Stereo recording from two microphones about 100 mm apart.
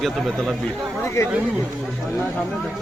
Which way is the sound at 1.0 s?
25° left (ahead or behind).